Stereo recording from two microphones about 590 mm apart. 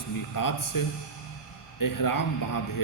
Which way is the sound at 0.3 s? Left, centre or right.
Left.